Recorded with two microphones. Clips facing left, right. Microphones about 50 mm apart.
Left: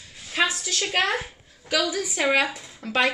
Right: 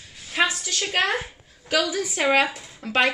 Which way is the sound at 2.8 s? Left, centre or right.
Right.